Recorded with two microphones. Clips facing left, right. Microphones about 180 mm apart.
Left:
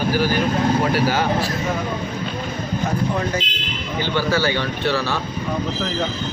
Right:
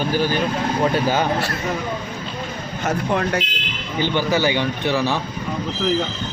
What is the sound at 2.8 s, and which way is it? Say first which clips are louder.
Speech: right 3 dB; 70° right (ahead or behind).